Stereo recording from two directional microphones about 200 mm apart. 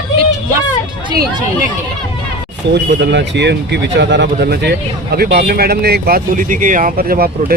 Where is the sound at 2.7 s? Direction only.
60° right (ahead or behind).